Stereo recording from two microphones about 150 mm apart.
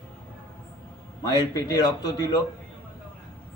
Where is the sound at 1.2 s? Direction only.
25° left (ahead or behind).